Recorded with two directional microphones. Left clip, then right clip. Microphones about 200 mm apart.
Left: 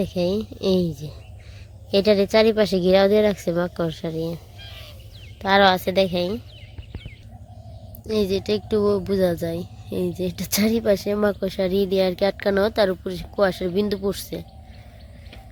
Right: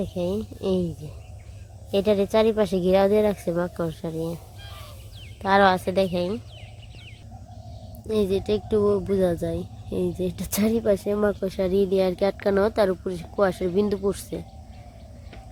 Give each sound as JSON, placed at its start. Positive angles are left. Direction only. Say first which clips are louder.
{"t": 0.0, "sound": "speech", "louder": "left 4 dB", "side_deg": 15}
{"t": 4.6, "sound": "fowl", "louder": "left 2 dB", "side_deg": -25}
{"t": 5.4, "sound": "speech", "louder": "left 2 dB", "side_deg": 5}
{"t": 8.0, "sound": "speech", "louder": "left 1 dB", "side_deg": 5}